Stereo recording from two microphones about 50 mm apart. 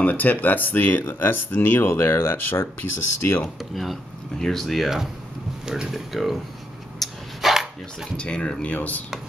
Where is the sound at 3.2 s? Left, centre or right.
Left.